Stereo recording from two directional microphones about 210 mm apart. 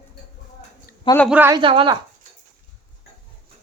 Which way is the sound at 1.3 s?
10° right (ahead or behind).